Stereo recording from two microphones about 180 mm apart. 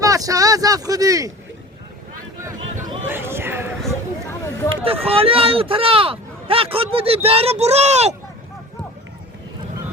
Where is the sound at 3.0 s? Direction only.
10° right (ahead or behind).